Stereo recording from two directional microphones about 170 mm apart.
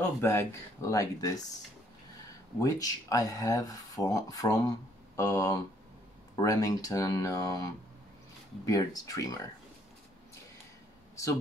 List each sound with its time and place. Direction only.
0.0 s speech: 15° left (ahead or behind)
2.6 s speech: 20° left (ahead or behind)
8.6 s speech: 20° left (ahead or behind)